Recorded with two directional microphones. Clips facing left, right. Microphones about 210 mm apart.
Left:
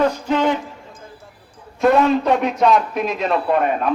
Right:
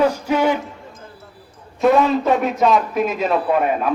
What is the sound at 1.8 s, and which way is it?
A man's voice, centre (ahead or behind).